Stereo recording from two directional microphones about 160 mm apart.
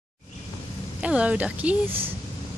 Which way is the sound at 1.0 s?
5° right (ahead or behind).